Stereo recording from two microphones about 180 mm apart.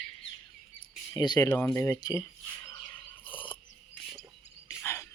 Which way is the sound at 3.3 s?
30° left (ahead or behind).